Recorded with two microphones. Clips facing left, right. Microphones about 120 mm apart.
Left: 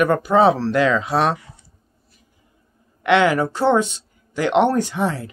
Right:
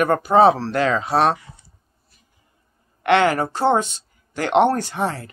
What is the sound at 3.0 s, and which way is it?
Speech, 50° right (ahead or behind).